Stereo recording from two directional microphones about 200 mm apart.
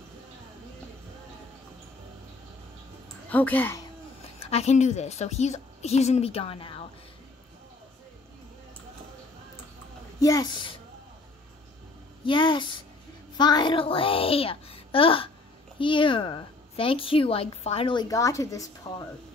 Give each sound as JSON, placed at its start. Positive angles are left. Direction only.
{"t": 3.3, "sound": "a woman's voice", "side_deg": 10}
{"t": 4.4, "sound": "a woman's voice", "side_deg": 30}
{"t": 10.2, "sound": "a woman's voice", "side_deg": 20}
{"t": 12.3, "sound": "a woman's voice", "side_deg": 25}